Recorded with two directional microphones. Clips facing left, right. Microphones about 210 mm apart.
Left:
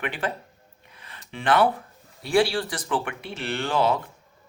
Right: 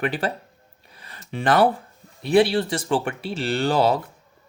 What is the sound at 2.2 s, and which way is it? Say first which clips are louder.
Speech: right 4 dB; 20° right (ahead or behind).